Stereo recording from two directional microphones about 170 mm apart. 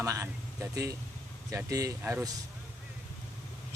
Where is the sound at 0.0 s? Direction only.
15° right (ahead or behind).